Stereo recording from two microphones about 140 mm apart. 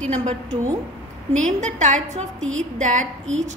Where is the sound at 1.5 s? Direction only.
60° right (ahead or behind).